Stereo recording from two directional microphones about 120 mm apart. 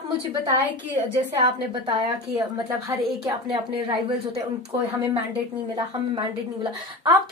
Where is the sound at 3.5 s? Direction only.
45° right (ahead or behind).